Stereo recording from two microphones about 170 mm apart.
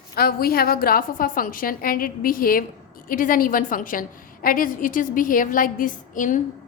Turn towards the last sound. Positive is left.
turn(degrees=50)  # may be behind; listen again after turning